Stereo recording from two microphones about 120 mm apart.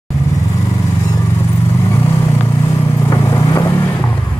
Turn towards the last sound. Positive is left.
turn(degrees=30)  # may be behind; listen again after turning